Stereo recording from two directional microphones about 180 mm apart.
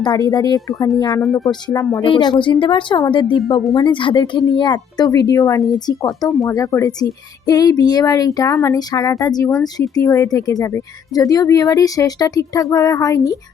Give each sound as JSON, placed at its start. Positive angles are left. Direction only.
{"t": 0.0, "sound": "speech", "side_deg": 20}